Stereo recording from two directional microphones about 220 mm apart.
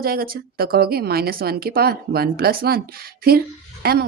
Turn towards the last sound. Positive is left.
turn(degrees=-45)  # may be behind; listen again after turning